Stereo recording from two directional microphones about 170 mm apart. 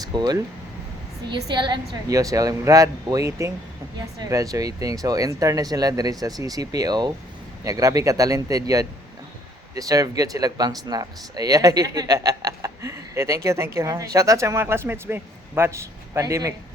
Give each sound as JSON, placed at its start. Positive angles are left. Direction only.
{"t": 0.0, "sound": "speech", "side_deg": -25}